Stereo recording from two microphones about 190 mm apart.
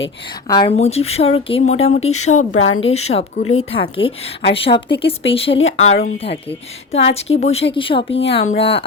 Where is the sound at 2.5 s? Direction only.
90° left.